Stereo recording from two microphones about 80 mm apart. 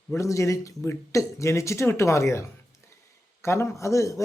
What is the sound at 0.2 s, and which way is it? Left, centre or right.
Speech, left.